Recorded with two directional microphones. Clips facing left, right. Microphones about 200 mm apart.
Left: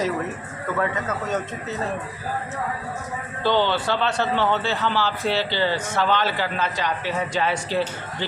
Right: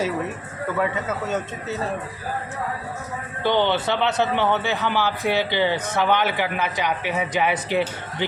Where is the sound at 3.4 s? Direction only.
15° right (ahead or behind).